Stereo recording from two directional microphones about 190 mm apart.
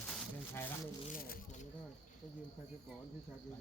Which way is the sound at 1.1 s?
50° left (ahead or behind).